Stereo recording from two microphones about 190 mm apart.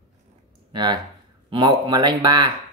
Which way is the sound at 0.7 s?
25° right (ahead or behind).